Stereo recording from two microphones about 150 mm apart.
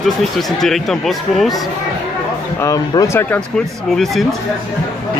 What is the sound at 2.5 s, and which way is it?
Speech, 20° left (ahead or behind).